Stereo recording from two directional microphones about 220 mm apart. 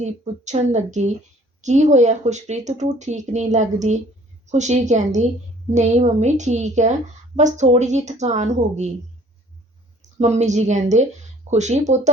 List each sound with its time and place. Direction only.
0.0 s speech: 30° right (ahead or behind)
10.0 s a woman's voice: 30° right (ahead or behind)